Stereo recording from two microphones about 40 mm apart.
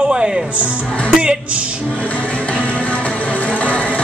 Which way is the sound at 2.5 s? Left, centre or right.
Left.